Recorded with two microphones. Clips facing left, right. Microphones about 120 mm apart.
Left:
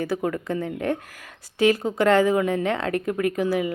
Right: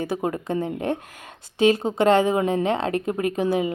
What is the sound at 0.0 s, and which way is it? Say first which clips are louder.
A woman's voice: even; 20° right (ahead or behind).